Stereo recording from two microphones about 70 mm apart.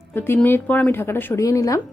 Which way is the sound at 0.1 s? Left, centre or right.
Left.